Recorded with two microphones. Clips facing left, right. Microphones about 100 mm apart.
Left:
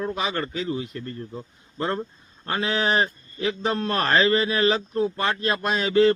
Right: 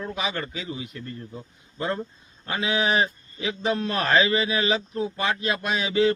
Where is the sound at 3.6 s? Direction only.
45° left (ahead or behind).